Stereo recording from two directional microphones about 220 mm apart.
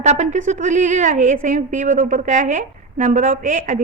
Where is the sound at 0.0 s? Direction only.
30° right (ahead or behind).